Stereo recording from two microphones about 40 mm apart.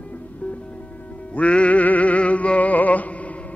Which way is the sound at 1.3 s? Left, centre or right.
Left.